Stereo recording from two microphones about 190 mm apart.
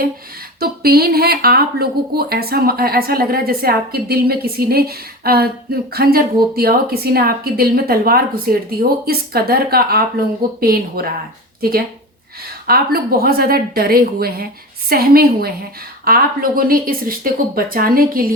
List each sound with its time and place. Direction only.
0.6 s speech: 55° right (ahead or behind)
12.6 s speech: 55° right (ahead or behind)